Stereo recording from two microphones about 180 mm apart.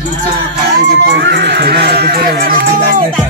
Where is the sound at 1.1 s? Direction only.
75° right (ahead or behind); by 3.1 s 50° right (ahead or behind).